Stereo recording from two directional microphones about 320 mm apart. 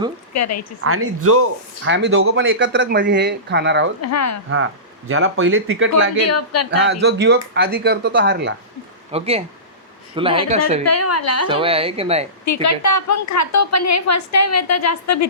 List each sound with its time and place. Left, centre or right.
0.3 s a woman's voice: left
0.9 s speech: right
4.0 s a woman's voice: left
4.5 s speech: right
6.2 s speech: left
6.7 s speech: right
9.1 s speech: centre
10.8 s speech: left
11.4 s speech: centre
12.6 s a woman's voice: left